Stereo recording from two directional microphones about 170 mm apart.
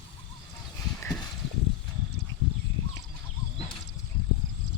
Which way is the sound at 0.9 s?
5° left (ahead or behind).